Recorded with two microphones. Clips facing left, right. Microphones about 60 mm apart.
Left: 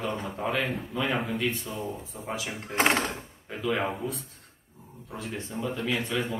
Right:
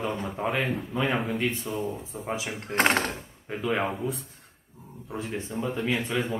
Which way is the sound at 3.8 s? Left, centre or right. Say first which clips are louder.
Right 1 dB; centre.